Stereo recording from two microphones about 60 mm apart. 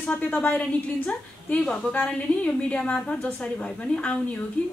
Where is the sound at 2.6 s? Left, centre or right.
Left.